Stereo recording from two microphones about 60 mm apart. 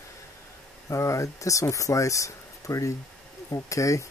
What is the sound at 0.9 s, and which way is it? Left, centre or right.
Speech, left.